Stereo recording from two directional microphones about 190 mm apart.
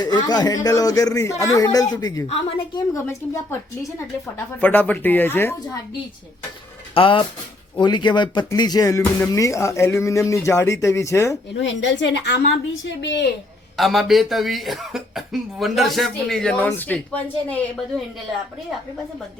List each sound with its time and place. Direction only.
0.0 s a man's voice: 20° left (ahead or behind)
2.2 s a woman's voice: 30° left (ahead or behind)
2.9 s speech: 15° left (ahead or behind)
6.9 s a man's voice: 25° left (ahead or behind)
11.6 s a woman's voice: 70° left (ahead or behind)
13.7 s speech: centre (ahead or behind)